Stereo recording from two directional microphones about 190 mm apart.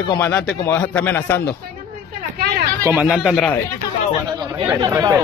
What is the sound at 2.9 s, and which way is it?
Speech, 5° right (ahead or behind).